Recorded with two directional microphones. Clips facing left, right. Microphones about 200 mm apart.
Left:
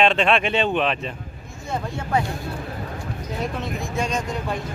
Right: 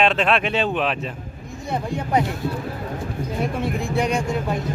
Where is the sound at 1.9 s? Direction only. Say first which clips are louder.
Right 3 dB; 15° right (ahead or behind).